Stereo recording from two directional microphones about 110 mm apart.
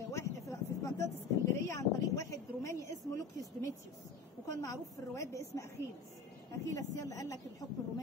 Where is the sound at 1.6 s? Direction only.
30° left (ahead or behind).